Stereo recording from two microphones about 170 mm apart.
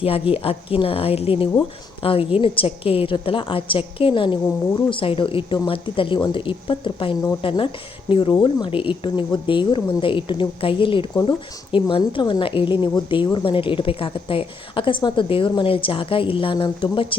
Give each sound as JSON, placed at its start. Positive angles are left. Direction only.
{"t": 0.0, "sound": "a woman's voice", "side_deg": 35}